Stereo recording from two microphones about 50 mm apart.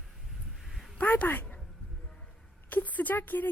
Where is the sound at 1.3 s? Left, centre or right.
Left.